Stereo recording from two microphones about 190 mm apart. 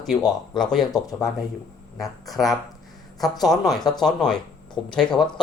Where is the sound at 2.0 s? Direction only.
Centre (ahead or behind).